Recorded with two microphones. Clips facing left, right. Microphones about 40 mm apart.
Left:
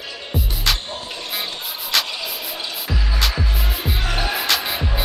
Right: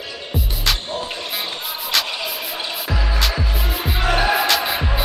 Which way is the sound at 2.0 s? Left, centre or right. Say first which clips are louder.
Right 3 dB; centre.